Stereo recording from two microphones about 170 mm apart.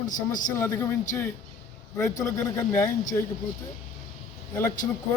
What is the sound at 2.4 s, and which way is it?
Speech, 15° left (ahead or behind).